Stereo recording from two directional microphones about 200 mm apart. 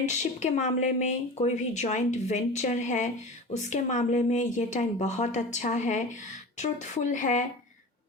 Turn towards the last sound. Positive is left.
turn(degrees=40)  # may be behind; listen again after turning